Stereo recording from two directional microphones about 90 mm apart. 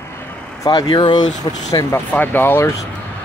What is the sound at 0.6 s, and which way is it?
Speech, 45° left (ahead or behind).